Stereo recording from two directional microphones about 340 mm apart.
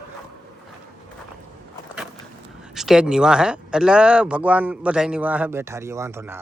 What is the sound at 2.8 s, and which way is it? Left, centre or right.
Speech, centre.